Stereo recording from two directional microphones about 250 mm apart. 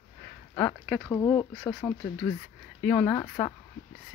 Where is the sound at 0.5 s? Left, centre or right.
Centre.